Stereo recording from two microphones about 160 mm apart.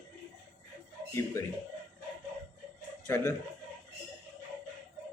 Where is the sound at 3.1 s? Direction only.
15° left (ahead or behind).